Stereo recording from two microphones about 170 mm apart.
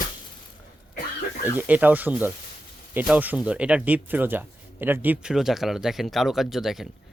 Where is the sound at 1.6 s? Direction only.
10° right (ahead or behind).